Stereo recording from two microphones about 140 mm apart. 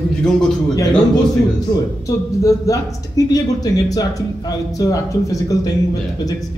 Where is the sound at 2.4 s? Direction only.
25° left (ahead or behind).